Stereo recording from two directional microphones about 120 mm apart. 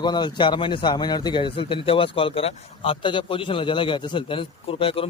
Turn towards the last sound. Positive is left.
turn(degrees=50)  # may be behind; listen again after turning